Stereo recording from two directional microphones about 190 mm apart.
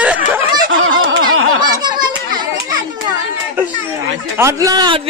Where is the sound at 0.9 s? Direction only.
90° right.